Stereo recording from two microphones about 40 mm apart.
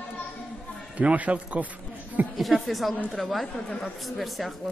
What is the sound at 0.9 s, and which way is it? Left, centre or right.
Speech, right.